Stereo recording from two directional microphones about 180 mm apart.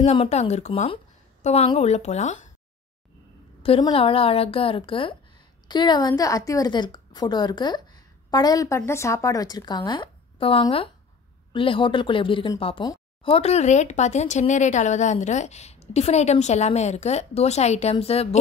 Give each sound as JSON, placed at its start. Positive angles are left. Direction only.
{"t": 0.0, "sound": "a woman's voice", "side_deg": 35}
{"t": 3.6, "sound": "a woman's voice", "side_deg": 30}